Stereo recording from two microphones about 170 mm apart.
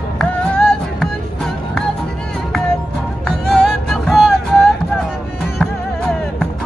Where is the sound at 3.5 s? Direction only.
Centre (ahead or behind).